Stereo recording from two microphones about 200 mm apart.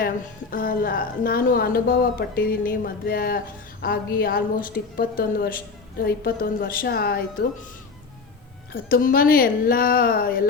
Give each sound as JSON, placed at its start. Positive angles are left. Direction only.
{"t": 0.5, "sound": "speech", "side_deg": 45}
{"t": 8.7, "sound": "speech", "side_deg": 45}